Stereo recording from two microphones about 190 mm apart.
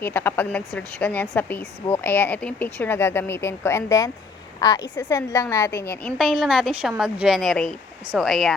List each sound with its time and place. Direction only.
0.0 s a woman's voice: 10° left (ahead or behind)